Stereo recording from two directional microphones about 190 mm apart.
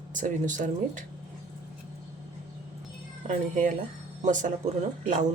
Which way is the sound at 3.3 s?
40° right (ahead or behind).